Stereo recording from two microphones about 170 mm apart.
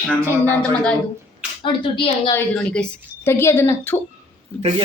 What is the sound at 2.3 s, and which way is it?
Speech, 10° left (ahead or behind).